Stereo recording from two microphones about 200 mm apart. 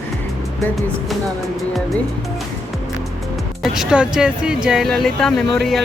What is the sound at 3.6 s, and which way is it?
Speech, centre (ahead or behind).